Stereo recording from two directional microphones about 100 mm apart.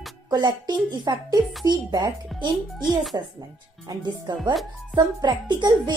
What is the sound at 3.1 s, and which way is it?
A woman's voice, 35° right (ahead or behind).